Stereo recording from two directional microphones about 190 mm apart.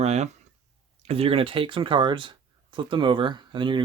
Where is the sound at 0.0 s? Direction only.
35° right (ahead or behind).